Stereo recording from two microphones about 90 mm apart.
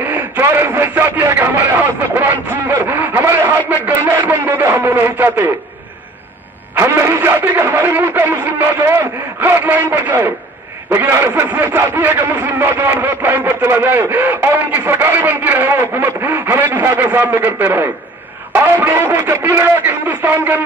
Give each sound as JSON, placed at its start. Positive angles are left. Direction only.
{"t": 0.1, "sound": "a sound", "side_deg": -20}
{"t": 3.8, "sound": "a man's voice", "side_deg": -20}
{"t": 6.7, "sound": "a man's voice", "side_deg": -25}